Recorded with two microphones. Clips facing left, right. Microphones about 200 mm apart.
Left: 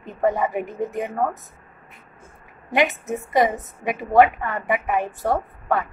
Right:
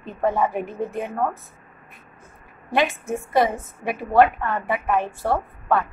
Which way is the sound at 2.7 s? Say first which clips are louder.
Left 1 dB; 20° left (ahead or behind).